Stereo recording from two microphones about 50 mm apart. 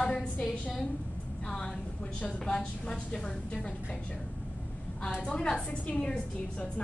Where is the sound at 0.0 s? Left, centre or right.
Centre.